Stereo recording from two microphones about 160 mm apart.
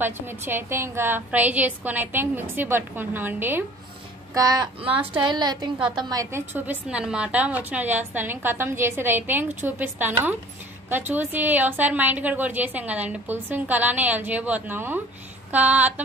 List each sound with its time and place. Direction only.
0.0 s a woman's voice: 15° right (ahead or behind)
4.3 s a woman's voice: 25° right (ahead or behind)